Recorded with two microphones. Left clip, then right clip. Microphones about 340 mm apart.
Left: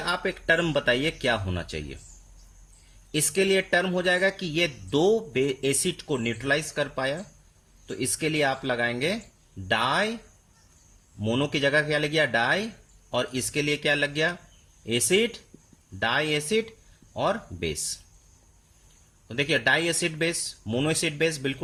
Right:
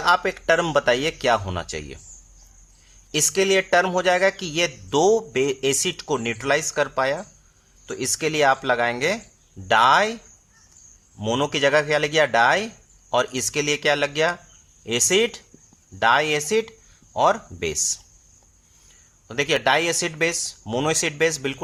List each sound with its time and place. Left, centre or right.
0.3 s speech: centre
3.1 s speech: centre
11.2 s a man's voice: right
11.4 s speech: centre
19.3 s speech: centre